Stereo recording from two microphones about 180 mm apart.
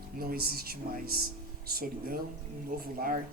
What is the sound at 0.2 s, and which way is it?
Speech, 55° right (ahead or behind).